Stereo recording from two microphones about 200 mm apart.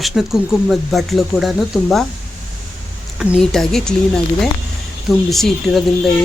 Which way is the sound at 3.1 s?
Centre (ahead or behind).